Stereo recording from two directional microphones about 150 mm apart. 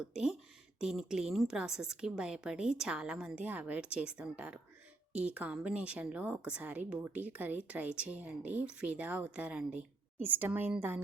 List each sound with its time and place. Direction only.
0.0 s a woman's voice: 5° right (ahead or behind)